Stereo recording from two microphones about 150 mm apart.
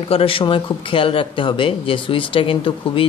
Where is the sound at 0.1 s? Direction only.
35° left (ahead or behind).